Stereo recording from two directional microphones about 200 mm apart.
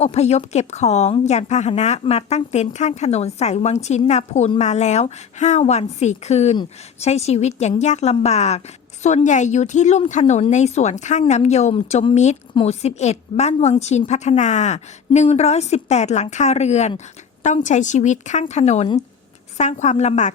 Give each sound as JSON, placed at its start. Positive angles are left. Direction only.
{"t": 0.0, "sound": "speech", "side_deg": 30}